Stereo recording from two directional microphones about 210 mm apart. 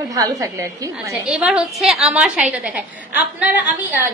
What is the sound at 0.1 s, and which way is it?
A woman's voice, 15° right (ahead or behind).